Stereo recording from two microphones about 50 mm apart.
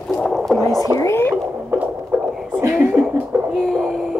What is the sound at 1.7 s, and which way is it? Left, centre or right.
Heart murmur, right.